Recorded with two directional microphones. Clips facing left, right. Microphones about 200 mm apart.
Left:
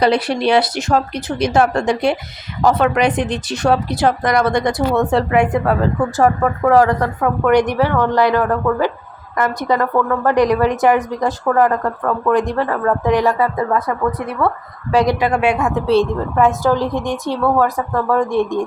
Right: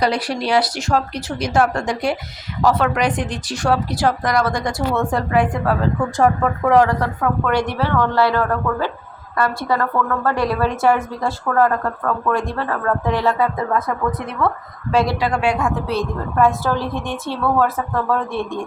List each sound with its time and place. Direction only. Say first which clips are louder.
0.0 s speech: left 5 dB; 25° left (ahead or behind)
6.1 s speech: left 1 dB; 5° left (ahead or behind)
6.8 s a woman's voice: left 3 dB; 15° left (ahead or behind)